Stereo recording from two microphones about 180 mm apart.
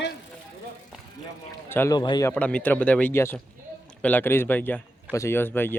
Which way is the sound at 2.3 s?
5° left (ahead or behind).